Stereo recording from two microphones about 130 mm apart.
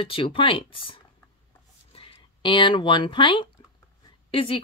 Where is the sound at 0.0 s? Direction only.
45° left (ahead or behind).